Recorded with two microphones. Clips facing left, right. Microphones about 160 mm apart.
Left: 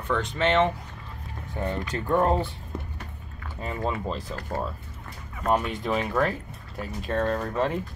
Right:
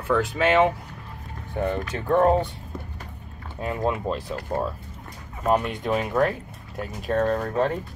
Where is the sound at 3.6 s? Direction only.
5° right (ahead or behind).